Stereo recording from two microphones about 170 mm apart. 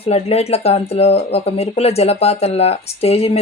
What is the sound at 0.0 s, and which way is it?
Speech, 35° left (ahead or behind).